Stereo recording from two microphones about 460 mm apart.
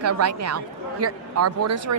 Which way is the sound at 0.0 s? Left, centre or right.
Right.